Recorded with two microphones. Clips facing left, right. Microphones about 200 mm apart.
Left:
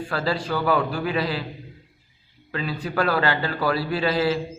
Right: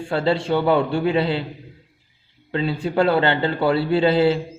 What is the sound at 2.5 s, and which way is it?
A man's voice, 25° right (ahead or behind).